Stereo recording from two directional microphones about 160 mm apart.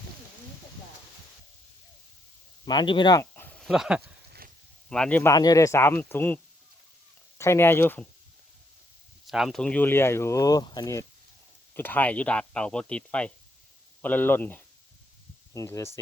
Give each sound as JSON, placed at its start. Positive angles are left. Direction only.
{"t": 2.6, "sound": "speech", "side_deg": 30}
{"t": 3.3, "sound": "a sound", "side_deg": 10}
{"t": 3.6, "sound": "speech", "side_deg": -5}
{"t": 4.0, "sound": "a sound", "side_deg": -85}
{"t": 4.9, "sound": "speech", "side_deg": 5}
{"t": 5.3, "sound": "speech", "side_deg": 25}
{"t": 9.2, "sound": "speech", "side_deg": 0}
{"t": 11.7, "sound": "speech", "side_deg": 10}